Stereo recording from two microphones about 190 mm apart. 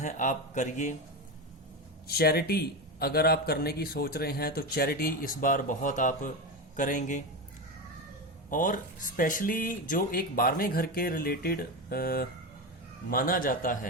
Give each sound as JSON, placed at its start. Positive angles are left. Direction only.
{"t": 0.0, "sound": "a man's voice", "side_deg": 40}
{"t": 2.0, "sound": "a man's voice", "side_deg": 55}
{"t": 8.4, "sound": "a man's voice", "side_deg": 45}